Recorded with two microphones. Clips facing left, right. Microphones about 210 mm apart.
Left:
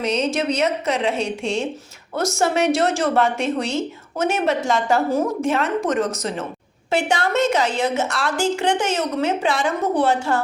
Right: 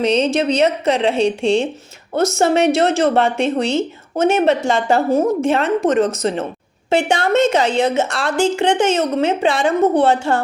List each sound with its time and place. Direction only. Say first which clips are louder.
0.0 s a woman's voice: right 5 dB; 30° right (ahead or behind)